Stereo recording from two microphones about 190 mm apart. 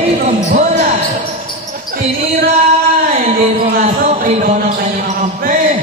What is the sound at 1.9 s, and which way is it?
Basketball bounce, 50° right (ahead or behind).